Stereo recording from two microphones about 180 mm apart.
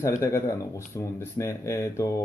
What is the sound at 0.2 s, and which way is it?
Speech, 15° left (ahead or behind).